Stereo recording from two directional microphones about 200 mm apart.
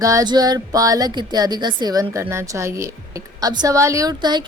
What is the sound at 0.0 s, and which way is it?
Speech, 15° right (ahead or behind).